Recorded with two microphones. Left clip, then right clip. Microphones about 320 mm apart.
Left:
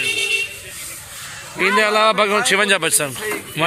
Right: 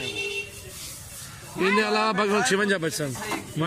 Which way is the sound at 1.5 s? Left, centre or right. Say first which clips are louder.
Left 7 dB; centre.